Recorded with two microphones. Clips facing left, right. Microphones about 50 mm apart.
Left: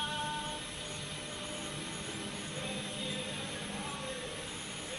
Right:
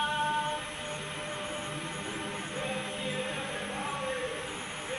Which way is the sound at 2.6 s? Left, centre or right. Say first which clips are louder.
Right 5 dB; right.